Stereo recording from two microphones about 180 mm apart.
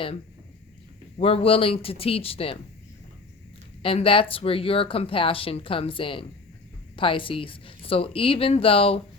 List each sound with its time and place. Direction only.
1.2 s speech: 35° left (ahead or behind)
3.8 s speech: 30° left (ahead or behind)